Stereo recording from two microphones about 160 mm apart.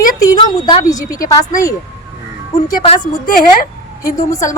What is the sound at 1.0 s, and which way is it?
Speech, 60° left (ahead or behind).